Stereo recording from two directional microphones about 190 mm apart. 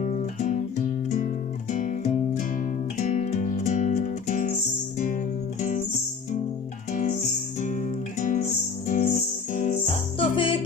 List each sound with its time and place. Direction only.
0.0 s music: 40° left (ahead or behind)
1.7 s music: 40° left (ahead or behind)
6.9 s music: 40° left (ahead or behind)
10.2 s music: 25° left (ahead or behind)